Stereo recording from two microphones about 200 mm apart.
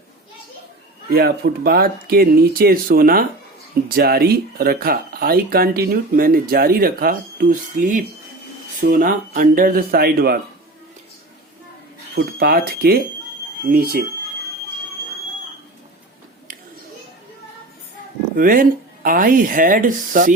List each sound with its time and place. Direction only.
1.1 s speech: 50° right (ahead or behind)
12.1 s speech: 50° right (ahead or behind)
18.3 s speech: 45° right (ahead or behind)